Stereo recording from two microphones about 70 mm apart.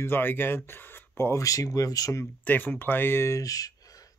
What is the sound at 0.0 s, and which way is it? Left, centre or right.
Speech, left.